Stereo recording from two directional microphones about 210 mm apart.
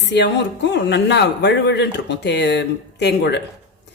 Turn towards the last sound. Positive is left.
turn(degrees=55)  # may be behind; listen again after turning